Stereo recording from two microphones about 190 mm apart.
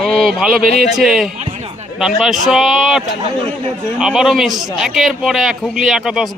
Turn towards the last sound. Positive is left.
turn(degrees=0)  # may be behind; listen again after turning